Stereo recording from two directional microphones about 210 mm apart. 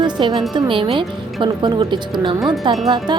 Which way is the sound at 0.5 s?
25° right (ahead or behind).